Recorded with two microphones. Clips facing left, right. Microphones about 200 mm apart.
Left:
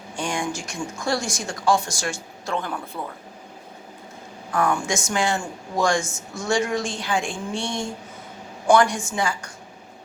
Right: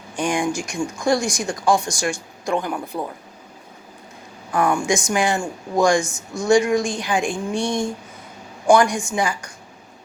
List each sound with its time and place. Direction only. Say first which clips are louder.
0.2 s speech: right 5 dB; 15° right (ahead or behind)
4.5 s speech: right 3 dB; 15° right (ahead or behind)